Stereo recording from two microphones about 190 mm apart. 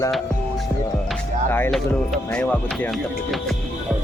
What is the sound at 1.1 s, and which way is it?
Music, 10° left (ahead or behind).